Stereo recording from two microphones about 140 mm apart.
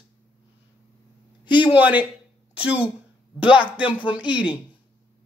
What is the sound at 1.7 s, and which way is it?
Speech, 10° right (ahead or behind).